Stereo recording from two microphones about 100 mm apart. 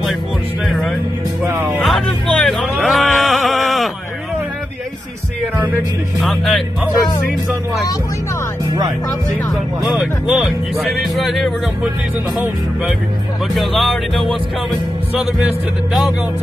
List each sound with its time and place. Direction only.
0.7 s music: 5° left (ahead or behind)
1.4 s music: 20° right (ahead or behind)
1.8 s music: 5° left (ahead or behind)
6.2 s speech: centre (ahead or behind)
9.8 s speech: 5° right (ahead or behind)
13.6 s speech: centre (ahead or behind)